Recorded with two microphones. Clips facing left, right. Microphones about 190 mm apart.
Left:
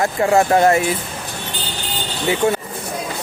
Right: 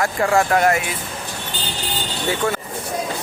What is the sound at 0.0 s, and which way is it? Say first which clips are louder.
Speech: left 3 dB; 25° left (ahead or behind).